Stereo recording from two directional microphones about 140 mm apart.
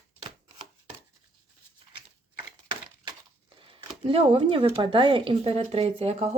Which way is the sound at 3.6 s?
40° right (ahead or behind).